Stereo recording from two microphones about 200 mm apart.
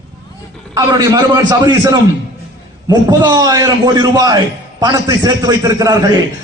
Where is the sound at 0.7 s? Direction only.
20° right (ahead or behind).